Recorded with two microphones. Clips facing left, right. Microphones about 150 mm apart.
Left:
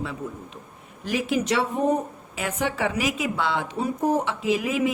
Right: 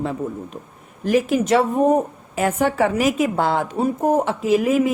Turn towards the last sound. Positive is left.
turn(degrees=-45)  # may be behind; listen again after turning